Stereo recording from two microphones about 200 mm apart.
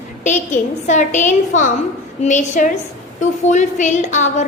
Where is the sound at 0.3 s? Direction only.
35° left (ahead or behind).